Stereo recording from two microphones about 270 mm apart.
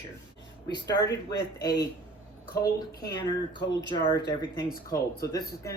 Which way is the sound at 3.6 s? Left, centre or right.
Left.